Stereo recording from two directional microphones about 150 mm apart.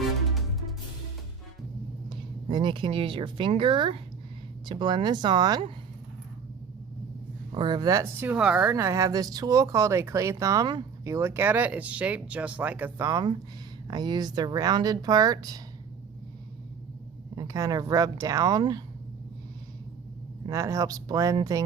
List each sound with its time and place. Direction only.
0.0 s music: centre (ahead or behind)
2.0 s speech: 35° right (ahead or behind)
7.5 s speech: 30° right (ahead or behind); by 8.7 s 10° right (ahead or behind)
8.7 s speech: 20° right (ahead or behind)
13.1 s speech: 25° right (ahead or behind)
17.3 s speech: 25° right (ahead or behind)
20.5 s speech: 20° right (ahead or behind)